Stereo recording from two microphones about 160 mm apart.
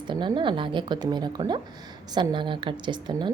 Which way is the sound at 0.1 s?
30° right (ahead or behind).